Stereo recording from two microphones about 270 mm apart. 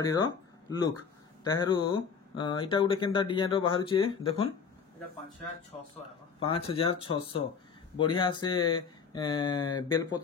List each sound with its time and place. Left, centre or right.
0.0 s speech: centre
6.4 s speech: left